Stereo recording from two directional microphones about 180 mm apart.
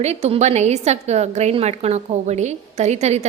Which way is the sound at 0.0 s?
35° right (ahead or behind).